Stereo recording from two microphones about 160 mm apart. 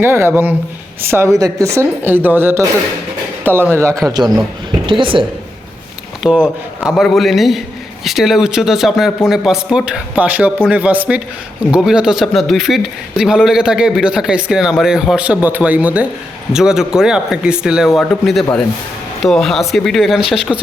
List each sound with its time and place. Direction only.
0.0 s speech: 15° right (ahead or behind)
4.9 s a woman's voice: 30° right (ahead or behind)
6.4 s a man's voice: centre (ahead or behind)